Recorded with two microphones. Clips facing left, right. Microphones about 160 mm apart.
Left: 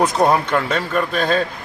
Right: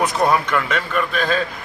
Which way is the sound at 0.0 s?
30° left (ahead or behind).